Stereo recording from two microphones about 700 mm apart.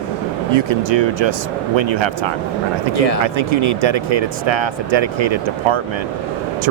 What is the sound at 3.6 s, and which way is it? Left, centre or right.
Speech, right.